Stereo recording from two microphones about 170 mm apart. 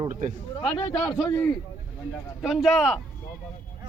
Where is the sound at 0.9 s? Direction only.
5° left (ahead or behind).